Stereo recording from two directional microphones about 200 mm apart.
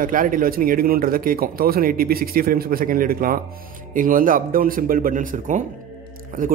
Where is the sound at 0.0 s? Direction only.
45° right (ahead or behind).